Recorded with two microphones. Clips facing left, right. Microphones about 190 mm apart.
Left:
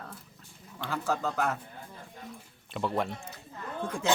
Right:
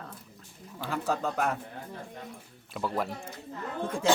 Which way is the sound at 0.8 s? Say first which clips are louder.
Right 1 dB; 15° right (ahead or behind).